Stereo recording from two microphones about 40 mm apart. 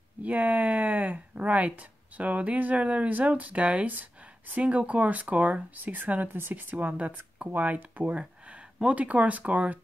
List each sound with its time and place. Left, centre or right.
0.2 s speech: right
3.1 s speech: right
6.9 s speech: right
8.0 s a sound: right
8.8 s speech: right